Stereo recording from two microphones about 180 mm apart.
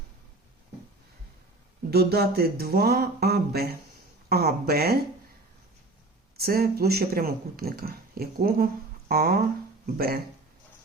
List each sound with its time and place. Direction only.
1.9 s speech: 60° right (ahead or behind)
6.3 s speech: 55° right (ahead or behind)